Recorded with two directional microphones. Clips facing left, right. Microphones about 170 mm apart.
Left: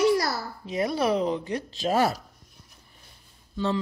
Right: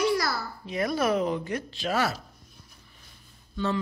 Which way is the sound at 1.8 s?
40° left (ahead or behind).